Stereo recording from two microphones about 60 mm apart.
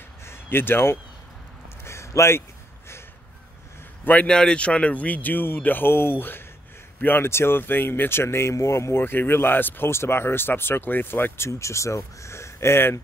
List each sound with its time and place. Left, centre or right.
0.2 s a sound: left
4.0 s a man's voice: left
4.3 s a man's voice: centre; by 9.0 s left
9.0 s speech: left